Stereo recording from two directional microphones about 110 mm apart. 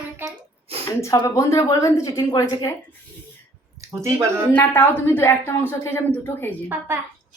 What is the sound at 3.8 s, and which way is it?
Speech, 25° right (ahead or behind).